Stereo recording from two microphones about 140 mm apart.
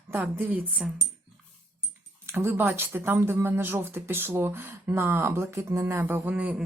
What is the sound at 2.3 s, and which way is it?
Speech, 20° right (ahead or behind).